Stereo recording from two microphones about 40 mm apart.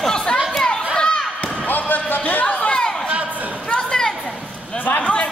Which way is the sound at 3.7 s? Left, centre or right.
Centre.